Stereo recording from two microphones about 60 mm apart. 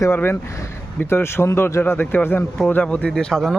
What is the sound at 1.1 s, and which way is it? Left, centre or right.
A man's voice, left.